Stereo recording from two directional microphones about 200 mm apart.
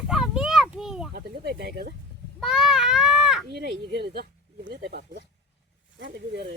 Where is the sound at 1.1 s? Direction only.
55° right (ahead or behind).